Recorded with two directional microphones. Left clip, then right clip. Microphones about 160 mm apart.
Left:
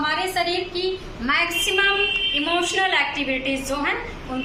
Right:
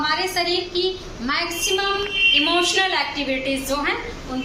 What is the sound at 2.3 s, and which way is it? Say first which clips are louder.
A woman's voice: right 4 dB; 10° left (ahead or behind).